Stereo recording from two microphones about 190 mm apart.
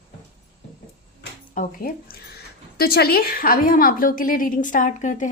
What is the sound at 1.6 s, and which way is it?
A woman's voice, 50° left (ahead or behind).